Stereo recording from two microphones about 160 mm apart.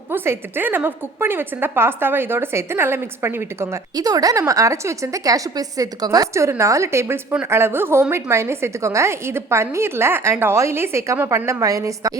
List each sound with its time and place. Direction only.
0.1 s a woman's voice: 15° right (ahead or behind)